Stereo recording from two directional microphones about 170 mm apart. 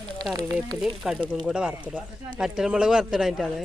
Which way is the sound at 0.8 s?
Centre (ahead or behind).